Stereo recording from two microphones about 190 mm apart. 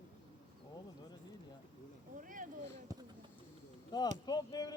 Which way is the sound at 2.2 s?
45° right (ahead or behind).